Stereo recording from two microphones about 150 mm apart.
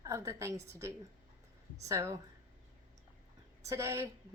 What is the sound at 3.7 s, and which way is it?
Speech, 20° right (ahead or behind).